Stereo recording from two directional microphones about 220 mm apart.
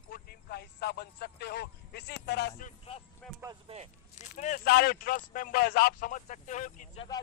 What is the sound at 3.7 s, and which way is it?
Speech, 25° right (ahead or behind).